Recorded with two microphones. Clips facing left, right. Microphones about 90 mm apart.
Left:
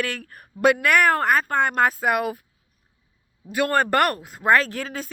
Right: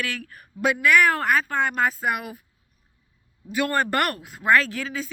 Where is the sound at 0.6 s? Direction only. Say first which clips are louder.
Left 2 dB; 55° left (ahead or behind).